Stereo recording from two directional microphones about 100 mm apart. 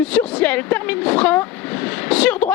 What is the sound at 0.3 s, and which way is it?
Speech, 15° left (ahead or behind).